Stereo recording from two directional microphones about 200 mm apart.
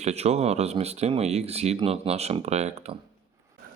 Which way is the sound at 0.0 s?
30° right (ahead or behind).